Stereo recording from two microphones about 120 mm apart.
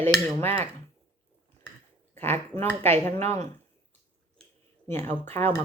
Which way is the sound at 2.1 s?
20° left (ahead or behind).